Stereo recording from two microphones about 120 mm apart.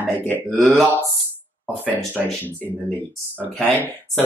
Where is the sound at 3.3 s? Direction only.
10° left (ahead or behind).